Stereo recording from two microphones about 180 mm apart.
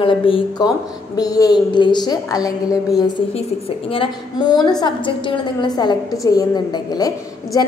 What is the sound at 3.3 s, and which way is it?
A woman's voice, 30° left (ahead or behind).